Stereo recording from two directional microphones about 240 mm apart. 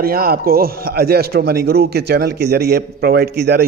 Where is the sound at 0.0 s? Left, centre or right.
Right.